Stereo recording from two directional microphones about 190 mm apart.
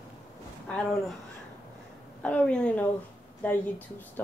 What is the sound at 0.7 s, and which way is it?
Speech, 5° left (ahead or behind).